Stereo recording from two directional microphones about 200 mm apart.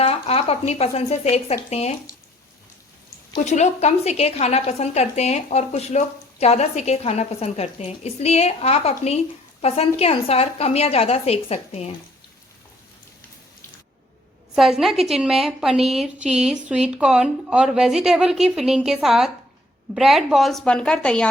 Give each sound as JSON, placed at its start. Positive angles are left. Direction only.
{"t": 0.0, "sound": "a woman's voice", "side_deg": 30}
{"t": 3.3, "sound": "a woman's voice", "side_deg": 35}
{"t": 14.5, "sound": "a woman's voice", "side_deg": 0}